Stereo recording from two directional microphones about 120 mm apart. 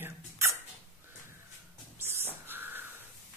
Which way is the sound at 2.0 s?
20° right (ahead or behind).